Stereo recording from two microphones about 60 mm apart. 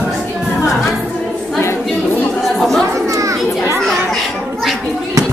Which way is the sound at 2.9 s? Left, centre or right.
Right.